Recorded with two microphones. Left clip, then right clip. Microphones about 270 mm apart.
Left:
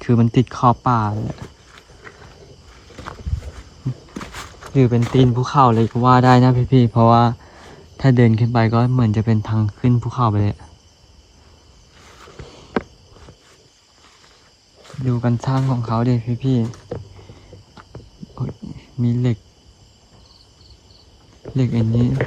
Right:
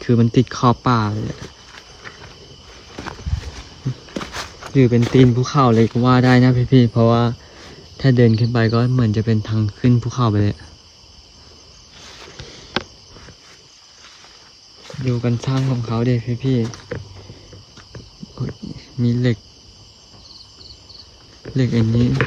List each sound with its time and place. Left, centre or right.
0.0 s speech: centre
4.6 s speech: centre
15.2 s speech: centre
18.3 s cricket: centre
21.5 s speech: centre